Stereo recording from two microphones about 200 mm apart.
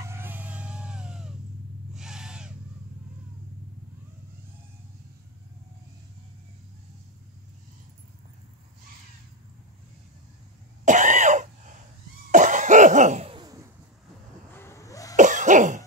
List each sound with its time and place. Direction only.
0.0 s music: 10° right (ahead or behind)
2.0 s owl: 5° right (ahead or behind)
10.9 s cough: 40° right (ahead or behind); by 13.7 s 20° right (ahead or behind)
14.5 s vehicle: 10° left (ahead or behind)
15.1 s cough: 40° right (ahead or behind)